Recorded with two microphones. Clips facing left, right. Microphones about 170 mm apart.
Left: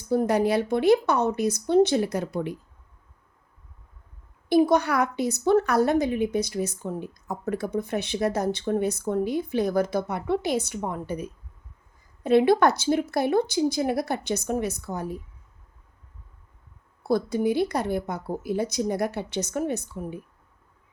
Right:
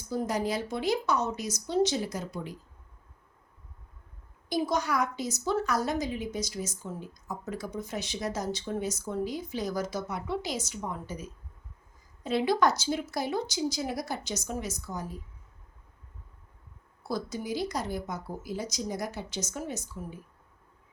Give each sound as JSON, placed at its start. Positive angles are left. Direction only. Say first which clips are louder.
{"t": 0.1, "sound": "a woman's voice", "louder": "left 8 dB", "side_deg": 60}
{"t": 4.4, "sound": "a woman's voice", "louder": "left 9 dB", "side_deg": 60}
{"t": 17.0, "sound": "a woman's voice", "louder": "left 10 dB", "side_deg": 60}